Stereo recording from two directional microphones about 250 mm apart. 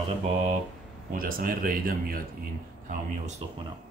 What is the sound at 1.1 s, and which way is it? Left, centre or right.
Speech, right.